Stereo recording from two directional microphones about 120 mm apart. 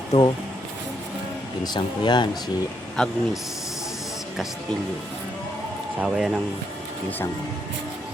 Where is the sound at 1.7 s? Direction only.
40° left (ahead or behind).